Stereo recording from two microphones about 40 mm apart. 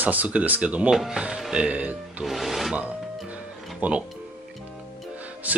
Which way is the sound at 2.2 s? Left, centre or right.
Centre.